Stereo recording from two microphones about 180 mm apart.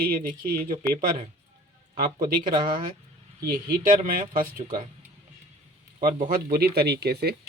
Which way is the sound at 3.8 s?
50° right (ahead or behind).